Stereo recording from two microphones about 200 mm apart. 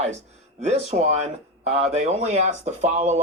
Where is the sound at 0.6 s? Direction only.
35° right (ahead or behind).